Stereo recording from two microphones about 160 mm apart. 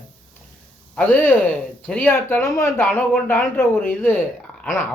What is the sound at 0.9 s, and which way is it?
Speech, 10° left (ahead or behind).